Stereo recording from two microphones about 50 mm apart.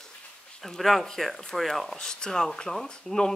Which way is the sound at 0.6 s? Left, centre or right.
Centre.